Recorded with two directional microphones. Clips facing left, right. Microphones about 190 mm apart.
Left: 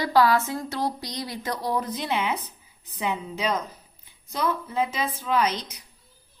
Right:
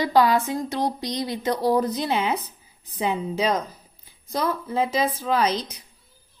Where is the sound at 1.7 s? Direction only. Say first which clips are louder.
Right 5 dB; 35° right (ahead or behind).